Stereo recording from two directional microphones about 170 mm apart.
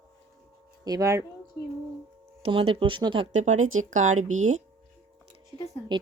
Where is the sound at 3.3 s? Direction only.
45° right (ahead or behind).